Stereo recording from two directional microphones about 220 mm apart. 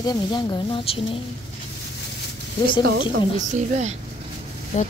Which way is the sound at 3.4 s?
35° right (ahead or behind).